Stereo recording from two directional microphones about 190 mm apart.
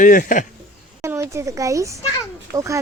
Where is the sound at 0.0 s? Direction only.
45° left (ahead or behind).